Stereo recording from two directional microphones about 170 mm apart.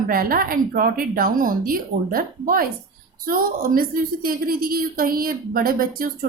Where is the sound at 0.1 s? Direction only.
60° right (ahead or behind).